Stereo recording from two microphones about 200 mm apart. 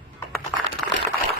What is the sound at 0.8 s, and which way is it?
Liquid, centre (ahead or behind).